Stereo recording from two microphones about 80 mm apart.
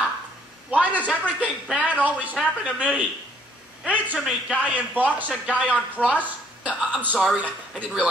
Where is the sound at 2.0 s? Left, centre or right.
Centre.